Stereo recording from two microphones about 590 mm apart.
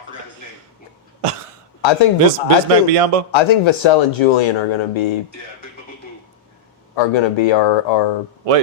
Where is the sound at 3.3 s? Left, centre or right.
Left.